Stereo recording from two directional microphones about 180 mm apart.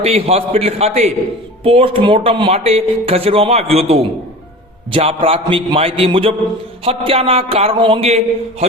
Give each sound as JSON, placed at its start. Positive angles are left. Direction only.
{"t": 0.0, "sound": "speech", "side_deg": -35}